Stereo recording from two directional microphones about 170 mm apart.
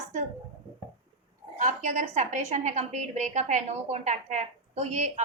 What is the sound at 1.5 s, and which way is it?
A woman's voice, 45° right (ahead or behind).